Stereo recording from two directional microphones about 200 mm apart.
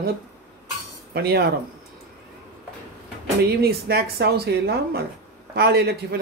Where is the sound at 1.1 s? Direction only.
50° right (ahead or behind).